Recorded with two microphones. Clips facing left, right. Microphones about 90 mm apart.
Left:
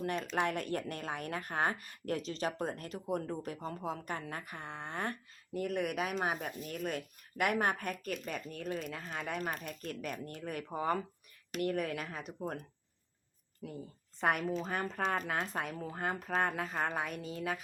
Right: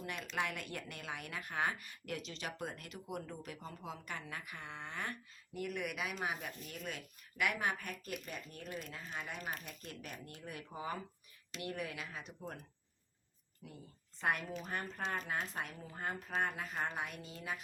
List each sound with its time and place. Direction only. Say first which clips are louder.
0.3 s a woman's voice: left 5 dB; 40° left (ahead or behind)
14.2 s speech: left 5 dB; 60° left (ahead or behind)
15.5 s speech: left 6 dB; 65° left (ahead or behind)
16.7 s speech: left 5 dB; 50° left (ahead or behind)